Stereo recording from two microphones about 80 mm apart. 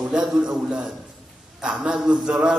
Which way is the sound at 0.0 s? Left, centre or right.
Centre.